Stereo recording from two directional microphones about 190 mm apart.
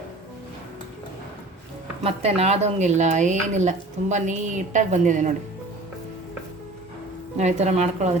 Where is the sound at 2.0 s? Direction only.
30° right (ahead or behind).